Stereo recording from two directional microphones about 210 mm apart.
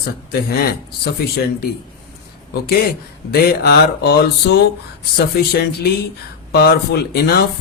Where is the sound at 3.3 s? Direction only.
50° left (ahead or behind).